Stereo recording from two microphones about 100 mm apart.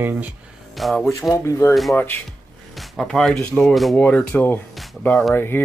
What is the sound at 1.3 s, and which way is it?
Speech, 30° left (ahead or behind).